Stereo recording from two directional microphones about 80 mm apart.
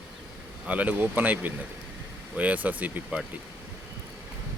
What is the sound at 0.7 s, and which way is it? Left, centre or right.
Speech, centre.